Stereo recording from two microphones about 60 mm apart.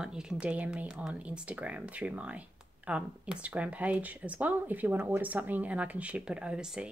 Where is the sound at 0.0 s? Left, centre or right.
Centre.